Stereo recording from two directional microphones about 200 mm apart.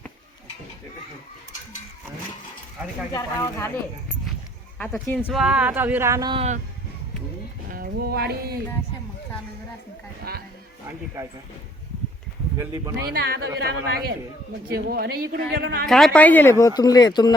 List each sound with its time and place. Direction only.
3.1 s speech: 15° left (ahead or behind)
5.1 s speech: centre (ahead or behind); by 6.4 s 20° right (ahead or behind)
7.7 s music: 50° right (ahead or behind)
10.3 s speech: 50° right (ahead or behind)
11.2 s speech: 15° right (ahead or behind)
12.5 s speech: 15° right (ahead or behind)
13.1 s a woman's voice: 50° right (ahead or behind)
15.9 s speech: centre (ahead or behind); by 17.3 s 20° left (ahead or behind)